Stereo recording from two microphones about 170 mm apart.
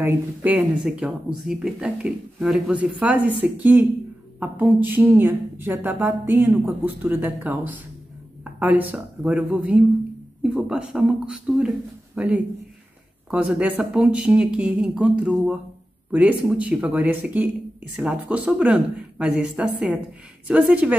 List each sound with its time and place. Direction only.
0.0 s speech: 10° right (ahead or behind)